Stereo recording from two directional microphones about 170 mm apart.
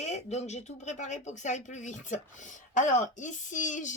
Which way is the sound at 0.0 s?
40° left (ahead or behind).